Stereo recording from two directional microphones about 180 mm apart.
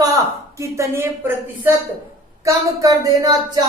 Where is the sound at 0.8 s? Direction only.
15° right (ahead or behind).